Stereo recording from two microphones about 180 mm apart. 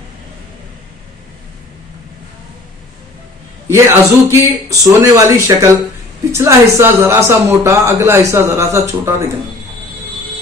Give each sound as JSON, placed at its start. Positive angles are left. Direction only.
{"t": 3.6, "sound": "speech", "side_deg": -15}